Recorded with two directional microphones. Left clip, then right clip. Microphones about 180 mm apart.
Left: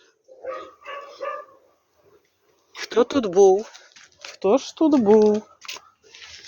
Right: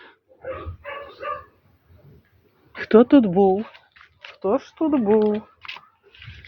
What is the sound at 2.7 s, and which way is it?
Speech, 30° left (ahead or behind).